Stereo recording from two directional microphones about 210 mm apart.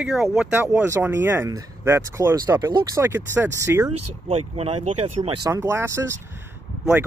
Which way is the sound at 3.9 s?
30° right (ahead or behind).